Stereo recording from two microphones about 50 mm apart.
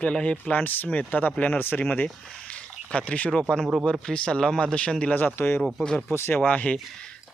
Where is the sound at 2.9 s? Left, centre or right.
Left.